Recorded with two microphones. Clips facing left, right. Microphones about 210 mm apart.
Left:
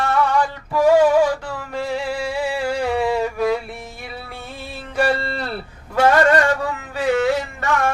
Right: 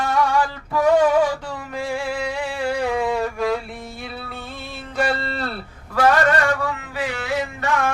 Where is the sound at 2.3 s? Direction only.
5° left (ahead or behind).